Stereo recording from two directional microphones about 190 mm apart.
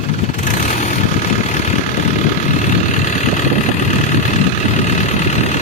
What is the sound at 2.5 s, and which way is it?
Vehicle, 40° left (ahead or behind).